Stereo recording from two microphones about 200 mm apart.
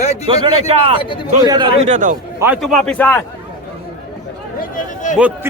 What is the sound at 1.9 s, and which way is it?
Speech, 40° right (ahead or behind).